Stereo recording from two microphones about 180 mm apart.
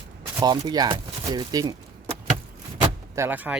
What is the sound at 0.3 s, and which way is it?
Speech, 20° right (ahead or behind).